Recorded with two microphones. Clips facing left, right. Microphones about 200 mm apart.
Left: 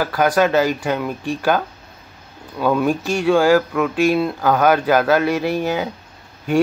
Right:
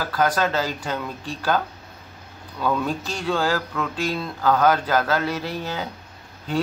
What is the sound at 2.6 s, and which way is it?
Speech, 10° left (ahead or behind).